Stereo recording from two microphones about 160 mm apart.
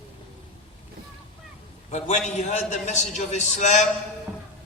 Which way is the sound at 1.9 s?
45° left (ahead or behind).